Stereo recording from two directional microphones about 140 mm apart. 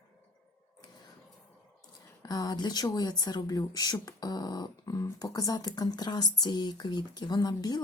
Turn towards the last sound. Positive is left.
turn(degrees=30)  # may be behind; listen again after turning